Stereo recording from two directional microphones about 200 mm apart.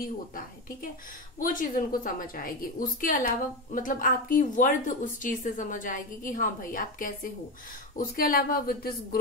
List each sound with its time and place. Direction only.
1.4 s a woman's voice: 40° left (ahead or behind)